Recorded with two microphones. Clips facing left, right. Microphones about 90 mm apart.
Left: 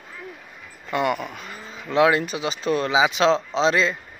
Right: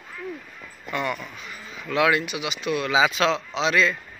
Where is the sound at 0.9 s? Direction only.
55° left (ahead or behind).